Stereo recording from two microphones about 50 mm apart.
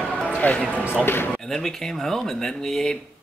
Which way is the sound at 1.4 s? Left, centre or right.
Centre.